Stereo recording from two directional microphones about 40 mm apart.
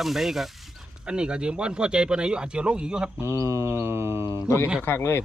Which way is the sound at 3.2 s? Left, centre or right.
Right.